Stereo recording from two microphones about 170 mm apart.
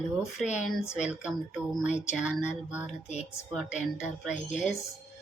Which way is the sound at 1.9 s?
45° left (ahead or behind).